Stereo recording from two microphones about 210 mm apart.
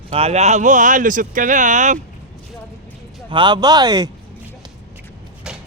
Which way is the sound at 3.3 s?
20° right (ahead or behind).